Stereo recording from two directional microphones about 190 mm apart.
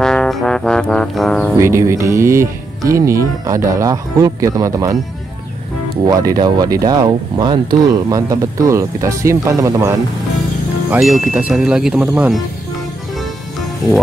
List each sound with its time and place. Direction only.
0.0 s music: 5° left (ahead or behind)
1.6 s speech: 15° right (ahead or behind)
6.0 s speech: 20° right (ahead or behind)
10.9 s speech: centre (ahead or behind)